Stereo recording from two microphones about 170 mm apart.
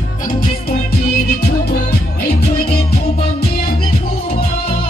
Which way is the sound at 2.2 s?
65° left (ahead or behind).